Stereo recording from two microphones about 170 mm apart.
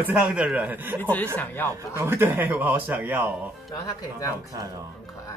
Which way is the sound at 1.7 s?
15° right (ahead or behind).